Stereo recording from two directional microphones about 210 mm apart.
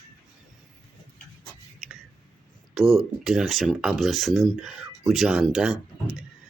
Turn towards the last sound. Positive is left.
turn(degrees=-5)  # may be behind; listen again after turning